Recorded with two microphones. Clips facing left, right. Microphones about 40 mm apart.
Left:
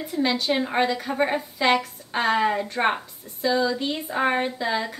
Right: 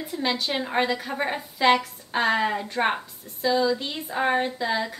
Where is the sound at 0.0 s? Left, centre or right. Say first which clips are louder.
Left 3 dB; centre.